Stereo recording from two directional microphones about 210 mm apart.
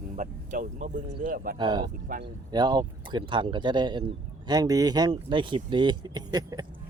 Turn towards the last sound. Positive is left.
turn(degrees=-20)  # may be behind; listen again after turning